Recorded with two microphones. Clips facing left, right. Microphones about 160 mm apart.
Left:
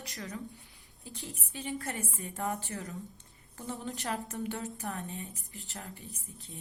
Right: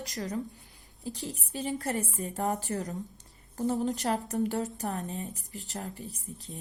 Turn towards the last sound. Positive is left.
turn(degrees=-35)  # may be behind; listen again after turning